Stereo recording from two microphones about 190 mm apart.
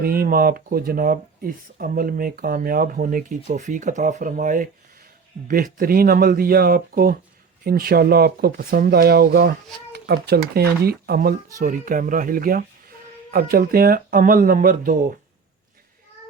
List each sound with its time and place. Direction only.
0.0 s speech: 50° right (ahead or behind)